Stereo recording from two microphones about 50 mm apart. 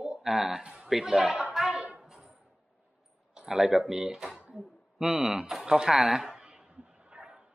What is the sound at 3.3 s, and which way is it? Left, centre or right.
Speech, centre.